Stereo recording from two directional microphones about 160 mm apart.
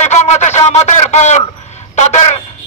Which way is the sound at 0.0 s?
45° left (ahead or behind).